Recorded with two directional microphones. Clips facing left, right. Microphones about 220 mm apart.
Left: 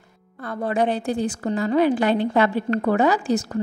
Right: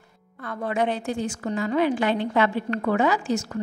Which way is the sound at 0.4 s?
35° left (ahead or behind).